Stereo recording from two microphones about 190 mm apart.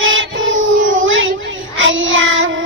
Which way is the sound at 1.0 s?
90° right.